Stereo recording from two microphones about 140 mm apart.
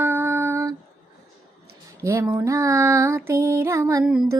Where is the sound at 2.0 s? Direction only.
20° right (ahead or behind).